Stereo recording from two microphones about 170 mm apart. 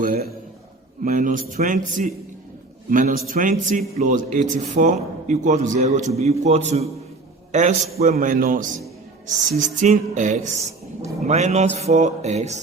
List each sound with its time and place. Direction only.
0.0 s a sound: 60° right (ahead or behind)
1.0 s a man's voice: 55° right (ahead or behind)
11.3 s music: 40° right (ahead or behind)